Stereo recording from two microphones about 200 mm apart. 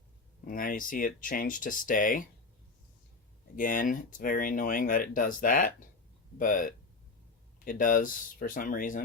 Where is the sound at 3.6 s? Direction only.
45° left (ahead or behind).